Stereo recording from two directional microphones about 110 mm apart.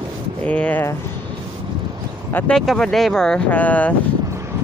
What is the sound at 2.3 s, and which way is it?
Speech, 10° left (ahead or behind).